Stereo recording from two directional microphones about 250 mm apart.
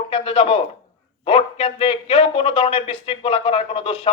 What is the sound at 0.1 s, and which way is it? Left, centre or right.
A man's voice, left.